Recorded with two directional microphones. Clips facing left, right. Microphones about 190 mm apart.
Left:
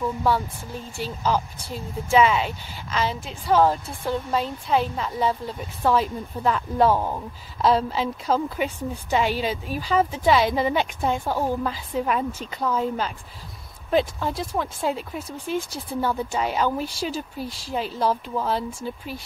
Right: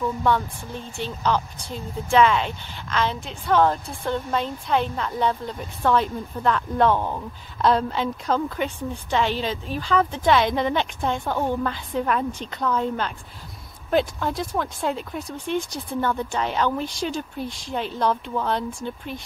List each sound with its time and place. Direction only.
0.2 s a woman's voice: 5° left (ahead or behind)